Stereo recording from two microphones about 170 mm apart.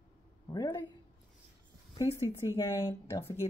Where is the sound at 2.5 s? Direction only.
15° left (ahead or behind).